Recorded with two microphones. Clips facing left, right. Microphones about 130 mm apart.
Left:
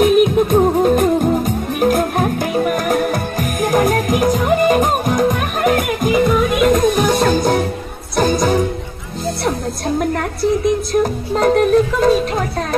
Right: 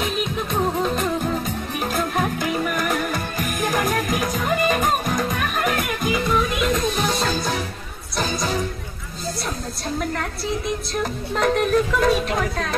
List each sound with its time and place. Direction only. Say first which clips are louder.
0.0 s music: left 13 dB; 55° left (ahead or behind)
9.9 s music: left 6 dB; 50° left (ahead or behind); by 12.6 s 30° left (ahead or behind)